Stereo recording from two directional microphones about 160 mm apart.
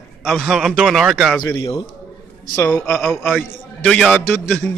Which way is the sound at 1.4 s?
25° left (ahead or behind).